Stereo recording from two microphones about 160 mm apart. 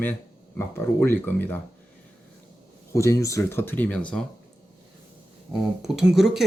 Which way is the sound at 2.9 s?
20° left (ahead or behind).